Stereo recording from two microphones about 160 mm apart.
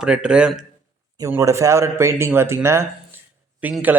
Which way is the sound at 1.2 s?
20° right (ahead or behind).